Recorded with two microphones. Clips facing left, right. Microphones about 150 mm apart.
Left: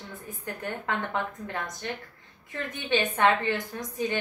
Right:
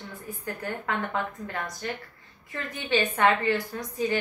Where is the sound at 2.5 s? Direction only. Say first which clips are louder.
Even; 20° left (ahead or behind).